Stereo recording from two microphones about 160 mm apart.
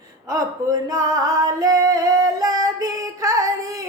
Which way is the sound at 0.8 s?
20° right (ahead or behind).